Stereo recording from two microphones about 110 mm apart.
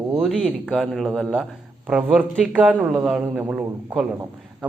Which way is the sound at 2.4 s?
5° right (ahead or behind).